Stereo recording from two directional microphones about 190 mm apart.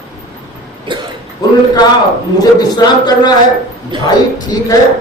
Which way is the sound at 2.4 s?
20° left (ahead or behind).